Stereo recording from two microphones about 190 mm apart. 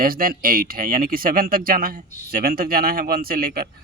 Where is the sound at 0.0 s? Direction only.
50° right (ahead or behind).